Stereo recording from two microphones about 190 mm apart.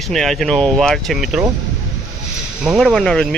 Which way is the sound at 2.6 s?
Centre (ahead or behind).